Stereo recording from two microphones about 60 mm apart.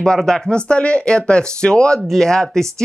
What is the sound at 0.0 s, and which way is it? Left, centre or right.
Speech, centre.